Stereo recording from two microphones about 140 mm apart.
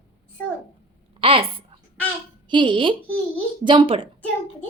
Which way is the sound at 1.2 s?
40° right (ahead or behind).